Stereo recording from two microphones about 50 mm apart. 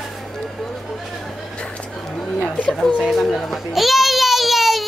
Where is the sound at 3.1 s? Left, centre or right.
Centre.